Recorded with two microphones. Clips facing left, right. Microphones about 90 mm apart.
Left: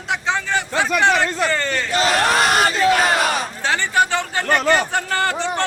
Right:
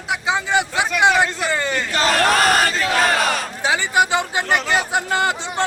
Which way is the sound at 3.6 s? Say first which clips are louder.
Right 1 dB; 10° right (ahead or behind).